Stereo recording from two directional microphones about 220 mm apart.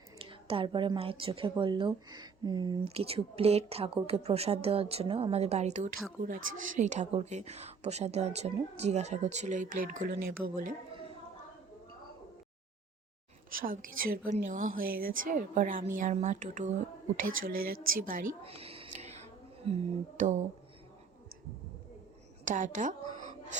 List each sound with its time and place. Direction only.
0.2 s a woman's voice: 25° right (ahead or behind)
13.6 s a woman's voice: 40° right (ahead or behind)
18.4 s a sound: 25° right (ahead or behind)
22.4 s a woman's voice: 35° right (ahead or behind)